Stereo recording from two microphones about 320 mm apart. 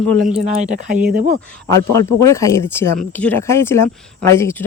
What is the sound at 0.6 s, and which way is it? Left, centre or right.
Speech, right.